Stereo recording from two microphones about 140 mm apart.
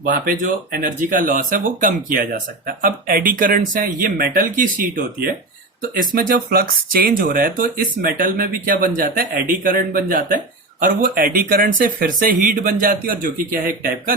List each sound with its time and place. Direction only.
0.0 s speech: 80° right
2.6 s speech: 90° right
5.9 s speech: 80° right